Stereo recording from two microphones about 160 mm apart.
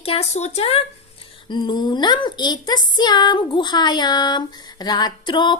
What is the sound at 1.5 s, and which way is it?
A woman's voice, 30° left (ahead or behind).